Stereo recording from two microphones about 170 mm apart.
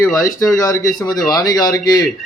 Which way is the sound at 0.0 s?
20° left (ahead or behind).